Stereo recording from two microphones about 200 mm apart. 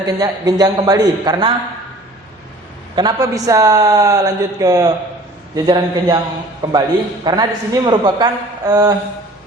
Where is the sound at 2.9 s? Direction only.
20° right (ahead or behind).